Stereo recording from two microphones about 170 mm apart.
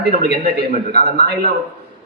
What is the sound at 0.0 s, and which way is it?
A man's voice, 70° right (ahead or behind).